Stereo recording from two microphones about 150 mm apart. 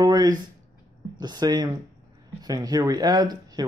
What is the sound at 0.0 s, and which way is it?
Speech, 25° right (ahead or behind).